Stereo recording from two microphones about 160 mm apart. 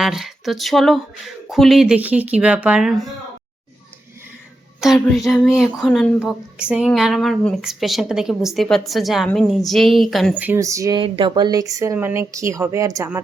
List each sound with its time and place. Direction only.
0.0 s speech: centre (ahead or behind)
5.0 s speech: centre (ahead or behind); by 13.1 s 20° right (ahead or behind)